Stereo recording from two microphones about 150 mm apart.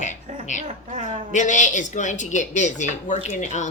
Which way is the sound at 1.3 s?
55° left (ahead or behind).